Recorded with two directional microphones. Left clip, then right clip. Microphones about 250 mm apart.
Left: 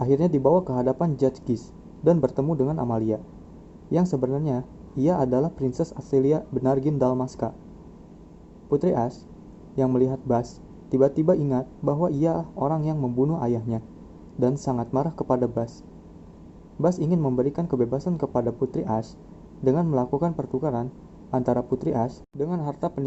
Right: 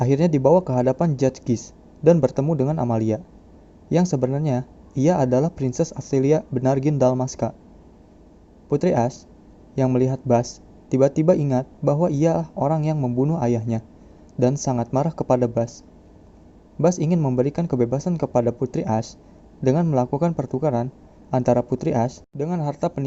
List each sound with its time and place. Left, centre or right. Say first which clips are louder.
0.0 s a man's voice: right 2 dB; right
8.7 s a man's voice: right 3 dB; right
16.8 s a man's voice: right 3 dB; right